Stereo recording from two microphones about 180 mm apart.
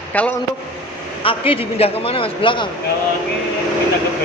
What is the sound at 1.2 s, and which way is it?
A man's voice, 30° left (ahead or behind).